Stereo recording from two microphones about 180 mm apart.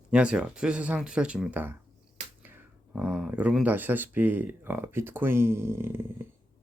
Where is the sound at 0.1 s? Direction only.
5° right (ahead or behind).